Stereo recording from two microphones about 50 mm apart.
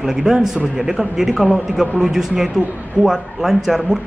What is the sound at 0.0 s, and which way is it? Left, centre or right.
Speech, centre.